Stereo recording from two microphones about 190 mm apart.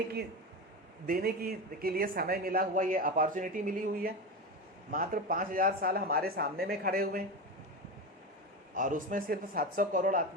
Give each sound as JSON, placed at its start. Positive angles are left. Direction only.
{"t": 1.0, "sound": "speech", "side_deg": -50}
{"t": 8.7, "sound": "speech", "side_deg": -45}